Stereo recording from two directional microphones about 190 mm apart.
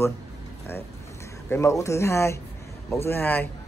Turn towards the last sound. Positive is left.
turn(degrees=10)  # may be behind; listen again after turning